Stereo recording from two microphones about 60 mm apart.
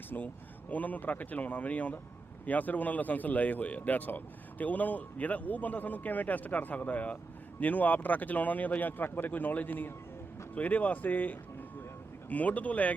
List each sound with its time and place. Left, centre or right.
0.1 s speech: left